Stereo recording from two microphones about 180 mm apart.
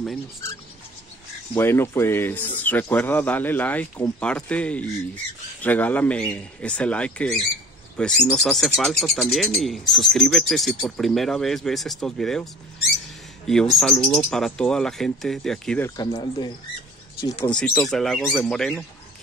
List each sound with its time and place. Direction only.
1.5 s speech: 15° left (ahead or behind)
13.5 s speech: centre (ahead or behind)
16.0 s speech: 25° left (ahead or behind)
17.5 s speech: 5° left (ahead or behind)